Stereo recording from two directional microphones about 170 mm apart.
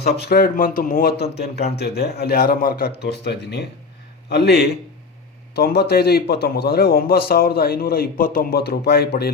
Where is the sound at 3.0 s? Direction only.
75° left (ahead or behind).